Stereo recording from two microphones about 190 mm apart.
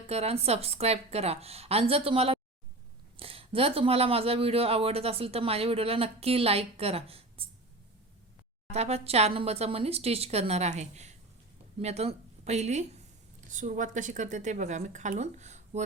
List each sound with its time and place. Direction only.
0.1 s speech: 35° right (ahead or behind)
8.7 s a woman's voice: 35° right (ahead or behind)